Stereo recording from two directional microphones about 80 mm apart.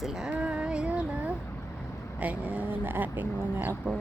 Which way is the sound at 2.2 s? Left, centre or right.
Centre.